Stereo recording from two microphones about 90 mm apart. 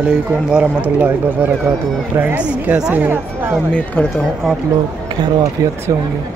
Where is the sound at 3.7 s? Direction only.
20° left (ahead or behind).